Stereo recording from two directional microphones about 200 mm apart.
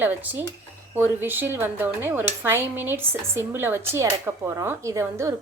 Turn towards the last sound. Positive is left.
turn(degrees=-15)  # may be behind; listen again after turning